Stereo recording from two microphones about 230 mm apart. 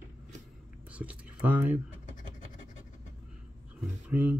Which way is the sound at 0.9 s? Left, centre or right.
Centre.